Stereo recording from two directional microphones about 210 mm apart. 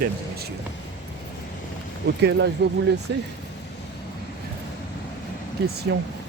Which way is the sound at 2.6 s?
50° right (ahead or behind).